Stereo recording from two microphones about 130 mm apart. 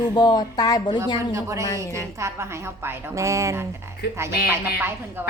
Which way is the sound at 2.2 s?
20° right (ahead or behind).